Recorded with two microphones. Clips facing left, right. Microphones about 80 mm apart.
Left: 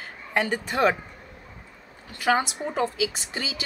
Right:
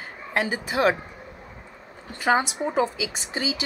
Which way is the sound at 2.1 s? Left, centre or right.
Right.